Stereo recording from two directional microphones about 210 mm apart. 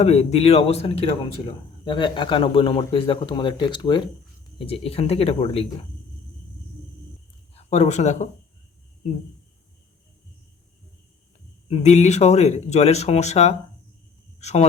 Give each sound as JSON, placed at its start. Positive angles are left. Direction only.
{"t": 0.0, "sound": "a man's voice", "side_deg": 30}
{"t": 7.5, "sound": "speech", "side_deg": 30}
{"t": 11.7, "sound": "speech", "side_deg": 30}